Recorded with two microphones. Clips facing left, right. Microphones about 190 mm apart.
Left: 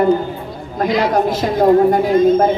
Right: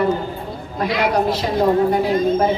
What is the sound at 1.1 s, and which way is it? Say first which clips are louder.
Speech: left 3 dB; 45° left (ahead or behind).